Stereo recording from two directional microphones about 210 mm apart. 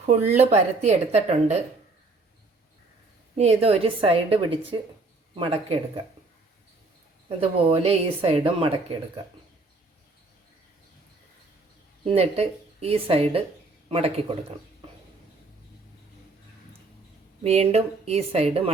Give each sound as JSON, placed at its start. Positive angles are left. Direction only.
{"t": 0.0, "sound": "speech", "side_deg": -30}
{"t": 3.3, "sound": "a woman's voice", "side_deg": -30}
{"t": 7.3, "sound": "a woman's voice", "side_deg": -30}
{"t": 12.0, "sound": "a woman's voice", "side_deg": -30}
{"t": 17.4, "sound": "a woman's voice", "side_deg": -30}